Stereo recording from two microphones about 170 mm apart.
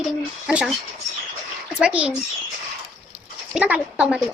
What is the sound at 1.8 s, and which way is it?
Speech, 5° right (ahead or behind).